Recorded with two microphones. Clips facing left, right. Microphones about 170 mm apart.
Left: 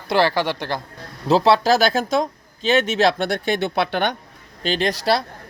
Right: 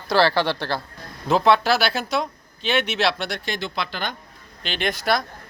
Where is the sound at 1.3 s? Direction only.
35° left (ahead or behind); by 4.1 s 60° left (ahead or behind).